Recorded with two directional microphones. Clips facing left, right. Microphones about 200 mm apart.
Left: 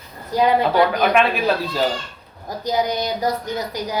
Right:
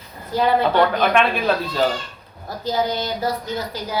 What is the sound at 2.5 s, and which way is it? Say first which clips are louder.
A man's voice: left 1 dB; 15° left (ahead or behind).